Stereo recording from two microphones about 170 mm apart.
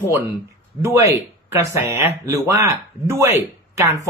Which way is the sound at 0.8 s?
20° right (ahead or behind).